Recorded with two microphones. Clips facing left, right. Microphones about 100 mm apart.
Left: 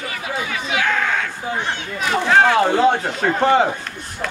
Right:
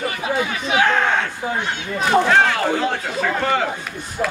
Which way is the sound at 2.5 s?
25° left (ahead or behind).